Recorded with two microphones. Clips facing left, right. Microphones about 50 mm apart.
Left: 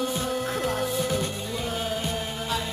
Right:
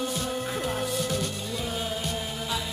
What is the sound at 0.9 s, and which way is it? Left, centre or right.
Music, centre.